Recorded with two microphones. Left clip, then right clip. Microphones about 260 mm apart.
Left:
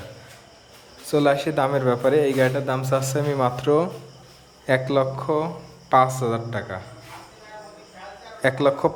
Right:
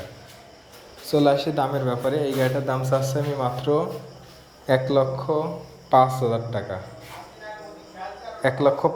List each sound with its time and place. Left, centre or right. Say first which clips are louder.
1.1 s a man's voice: even; left
1.7 s a man's voice: left 5 dB; centre
8.4 s a man's voice: even; centre